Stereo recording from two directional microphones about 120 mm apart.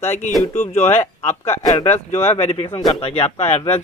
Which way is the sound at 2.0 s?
65° left (ahead or behind).